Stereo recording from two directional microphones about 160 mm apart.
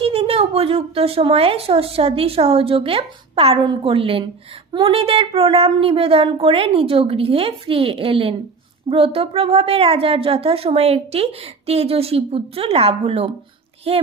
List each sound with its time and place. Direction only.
0.0 s a woman's voice: 35° right (ahead or behind)